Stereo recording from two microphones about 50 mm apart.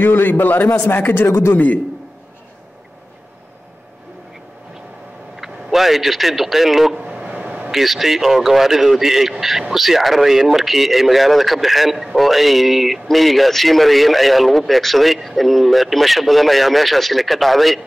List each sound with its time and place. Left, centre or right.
0.0 s a man's voice: left
5.3 s a man's voice: centre
7.0 s a sound: centre
7.7 s speech: centre